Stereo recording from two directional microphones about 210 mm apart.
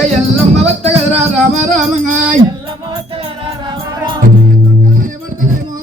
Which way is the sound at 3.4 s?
20° right (ahead or behind).